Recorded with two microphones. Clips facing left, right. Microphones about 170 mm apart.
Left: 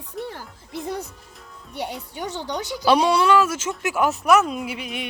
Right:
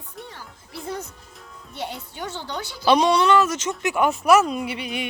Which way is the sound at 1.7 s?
15° left (ahead or behind).